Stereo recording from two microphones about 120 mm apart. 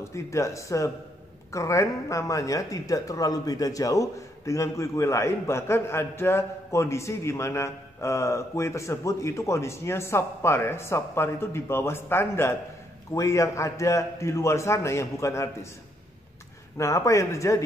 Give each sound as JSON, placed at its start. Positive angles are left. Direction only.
{"t": 0.0, "sound": "speech", "side_deg": 25}
{"t": 16.7, "sound": "speech", "side_deg": 25}